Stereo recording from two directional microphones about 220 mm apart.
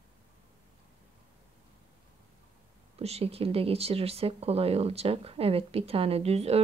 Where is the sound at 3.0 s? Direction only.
30° right (ahead or behind).